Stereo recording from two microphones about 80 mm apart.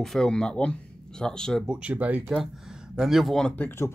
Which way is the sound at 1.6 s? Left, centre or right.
Centre.